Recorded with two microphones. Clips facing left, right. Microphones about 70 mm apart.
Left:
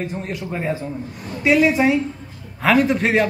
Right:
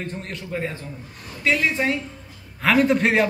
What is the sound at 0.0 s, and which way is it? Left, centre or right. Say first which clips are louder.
A man's voice: left 5 dB; centre.